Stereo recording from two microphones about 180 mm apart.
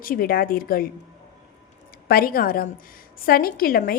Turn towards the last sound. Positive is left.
turn(degrees=55)  # may be behind; listen again after turning